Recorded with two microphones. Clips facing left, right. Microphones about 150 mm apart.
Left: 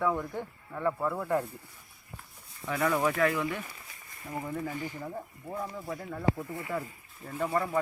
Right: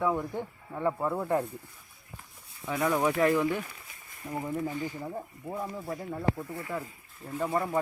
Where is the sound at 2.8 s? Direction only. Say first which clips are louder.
Right 1 dB; 5° right (ahead or behind).